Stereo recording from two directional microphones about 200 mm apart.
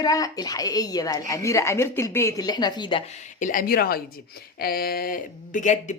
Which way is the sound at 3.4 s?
45° left (ahead or behind).